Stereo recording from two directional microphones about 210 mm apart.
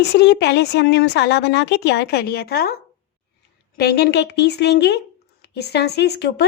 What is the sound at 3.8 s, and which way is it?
A woman's voice, 50° left (ahead or behind).